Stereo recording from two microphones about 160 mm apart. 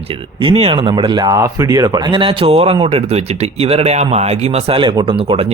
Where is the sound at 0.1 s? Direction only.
35° right (ahead or behind).